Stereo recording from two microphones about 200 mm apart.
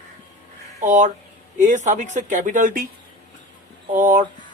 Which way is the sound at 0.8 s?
40° right (ahead or behind).